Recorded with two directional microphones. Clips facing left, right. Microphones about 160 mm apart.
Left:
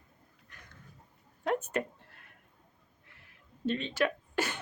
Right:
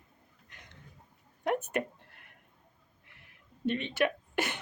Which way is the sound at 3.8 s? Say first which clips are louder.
Right 1 dB; 15° right (ahead or behind).